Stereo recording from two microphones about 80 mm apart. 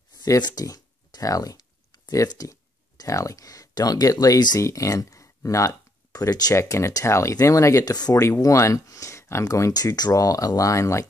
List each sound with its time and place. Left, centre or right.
0.2 s speech: left
4.6 s speech: left
6.5 s speech: left
7.8 s speech: left
8.1 s speech: left